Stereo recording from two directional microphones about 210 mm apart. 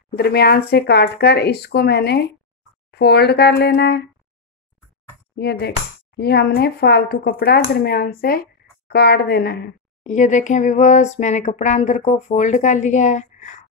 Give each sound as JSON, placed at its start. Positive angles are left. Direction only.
{"t": 0.1, "sound": "speech", "side_deg": 50}
{"t": 5.3, "sound": "speech", "side_deg": 50}
{"t": 10.0, "sound": "a sound", "side_deg": 35}